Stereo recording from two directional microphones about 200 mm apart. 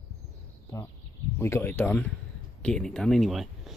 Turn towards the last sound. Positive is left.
turn(degrees=0)  # may be behind; listen again after turning